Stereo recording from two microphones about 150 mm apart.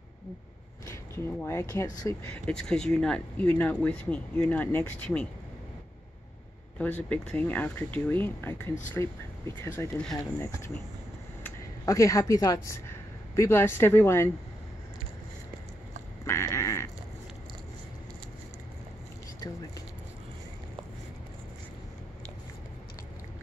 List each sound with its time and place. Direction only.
0.8 s speech: 15° left (ahead or behind)
2.3 s speech: 5° left (ahead or behind)
6.8 s speech: 10° left (ahead or behind)
11.4 s a sound: 20° left (ahead or behind)
13.4 s speech: 15° left (ahead or behind)
16.3 s a sound: 20° left (ahead or behind)